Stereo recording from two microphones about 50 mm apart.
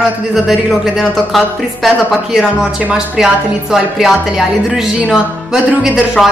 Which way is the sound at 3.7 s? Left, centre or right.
Centre.